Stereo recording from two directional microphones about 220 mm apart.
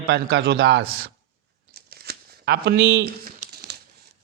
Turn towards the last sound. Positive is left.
turn(degrees=-50)  # may be behind; listen again after turning